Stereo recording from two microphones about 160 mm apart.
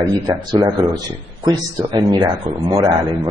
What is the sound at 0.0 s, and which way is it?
Speech, 25° right (ahead or behind).